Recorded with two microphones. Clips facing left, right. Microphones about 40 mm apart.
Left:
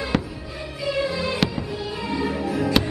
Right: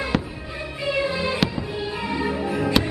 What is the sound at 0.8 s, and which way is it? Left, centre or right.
Music, right.